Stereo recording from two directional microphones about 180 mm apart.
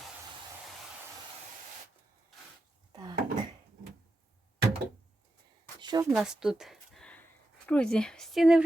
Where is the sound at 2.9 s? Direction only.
25° right (ahead or behind).